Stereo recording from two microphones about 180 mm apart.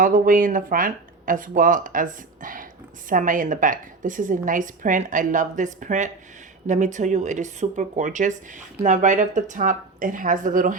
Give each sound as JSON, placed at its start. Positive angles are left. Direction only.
{"t": 0.0, "sound": "speech", "side_deg": -50}